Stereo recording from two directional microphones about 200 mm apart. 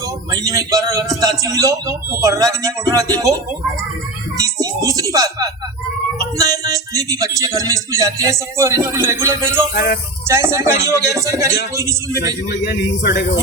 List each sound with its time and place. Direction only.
0.3 s speech: 20° right (ahead or behind)
4.4 s music: 15° right (ahead or behind)
6.1 s speech: 15° right (ahead or behind)
9.7 s speech: 50° left (ahead or behind)
10.2 s speech: 15° right (ahead or behind)
12.2 s a man's voice: 55° left (ahead or behind)